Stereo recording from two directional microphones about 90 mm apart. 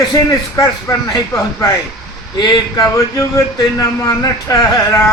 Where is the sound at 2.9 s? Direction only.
35° left (ahead or behind).